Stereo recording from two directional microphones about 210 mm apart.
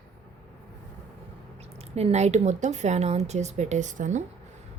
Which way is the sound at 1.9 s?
30° right (ahead or behind).